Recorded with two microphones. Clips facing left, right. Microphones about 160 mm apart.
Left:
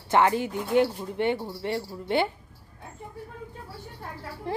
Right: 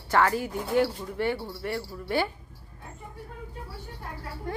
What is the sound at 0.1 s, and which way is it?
Speech, 20° left (ahead or behind).